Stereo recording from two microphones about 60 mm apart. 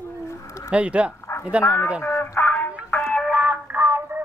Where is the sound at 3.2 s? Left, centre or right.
Centre.